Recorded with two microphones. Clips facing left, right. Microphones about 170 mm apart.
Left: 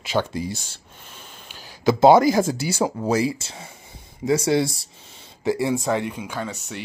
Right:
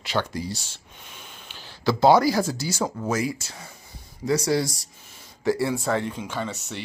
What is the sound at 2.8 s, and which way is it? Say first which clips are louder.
Speech: left 5 dB; 30° left (ahead or behind).